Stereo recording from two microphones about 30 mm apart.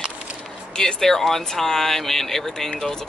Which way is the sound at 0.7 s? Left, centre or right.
Left.